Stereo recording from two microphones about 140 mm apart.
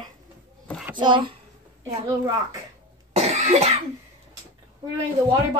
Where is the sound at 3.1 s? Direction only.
50° right (ahead or behind).